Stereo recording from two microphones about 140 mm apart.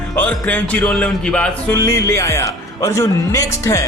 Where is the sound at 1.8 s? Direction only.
20° left (ahead or behind).